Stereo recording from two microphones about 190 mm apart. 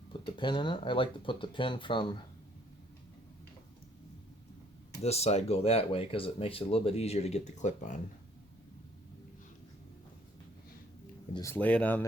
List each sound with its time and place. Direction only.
0.1 s speech: 25° left (ahead or behind)
5.0 s speech: 35° left (ahead or behind)
11.3 s speech: 15° left (ahead or behind)